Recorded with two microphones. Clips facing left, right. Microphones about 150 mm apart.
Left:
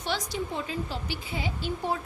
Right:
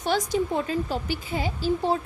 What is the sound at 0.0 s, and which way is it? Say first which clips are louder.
A woman's voice: right 7 dB; 45° right (ahead or behind).